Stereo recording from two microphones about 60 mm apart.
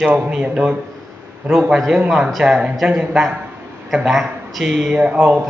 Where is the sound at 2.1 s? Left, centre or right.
Centre.